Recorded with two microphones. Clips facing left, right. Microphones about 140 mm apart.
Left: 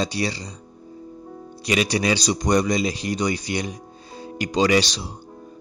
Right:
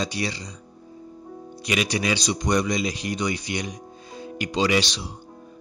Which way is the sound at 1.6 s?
35° left (ahead or behind).